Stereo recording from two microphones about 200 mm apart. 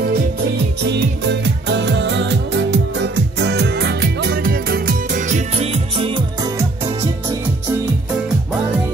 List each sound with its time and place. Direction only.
0.8 s music: 60° right (ahead or behind); by 6.5 s 25° right (ahead or behind)